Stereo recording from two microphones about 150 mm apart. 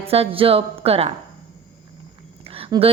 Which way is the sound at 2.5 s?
40° right (ahead or behind).